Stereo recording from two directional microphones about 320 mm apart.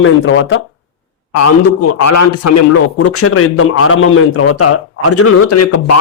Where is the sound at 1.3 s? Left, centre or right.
Left.